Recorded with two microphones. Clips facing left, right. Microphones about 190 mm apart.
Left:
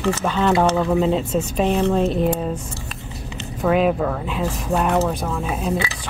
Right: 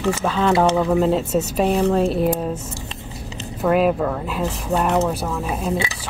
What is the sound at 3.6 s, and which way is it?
Speech, centre (ahead or behind).